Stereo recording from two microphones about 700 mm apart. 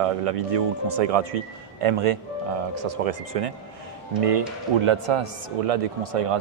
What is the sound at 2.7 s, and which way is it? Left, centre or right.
Speech, right.